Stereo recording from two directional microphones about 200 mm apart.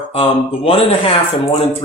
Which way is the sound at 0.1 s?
25° left (ahead or behind).